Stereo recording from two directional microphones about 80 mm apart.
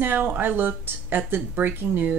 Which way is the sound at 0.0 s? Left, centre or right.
Right.